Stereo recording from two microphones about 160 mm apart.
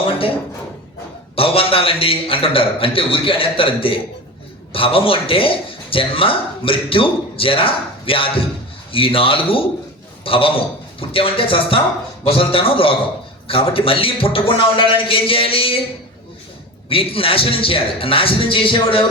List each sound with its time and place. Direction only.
0.0 s a sound: 35° left (ahead or behind)
1.4 s speech: 35° left (ahead or behind)
16.9 s speech: 35° left (ahead or behind)